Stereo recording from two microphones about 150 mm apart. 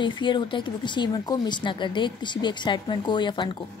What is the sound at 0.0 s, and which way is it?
Speech, 30° left (ahead or behind).